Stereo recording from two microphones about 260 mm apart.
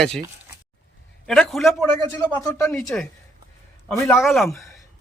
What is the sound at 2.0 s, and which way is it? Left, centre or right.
A man's voice, centre.